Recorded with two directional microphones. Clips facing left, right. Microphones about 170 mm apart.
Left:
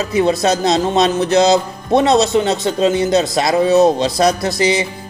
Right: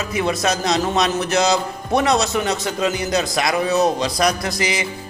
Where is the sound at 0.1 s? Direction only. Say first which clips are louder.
Left 6 dB; 30° left (ahead or behind).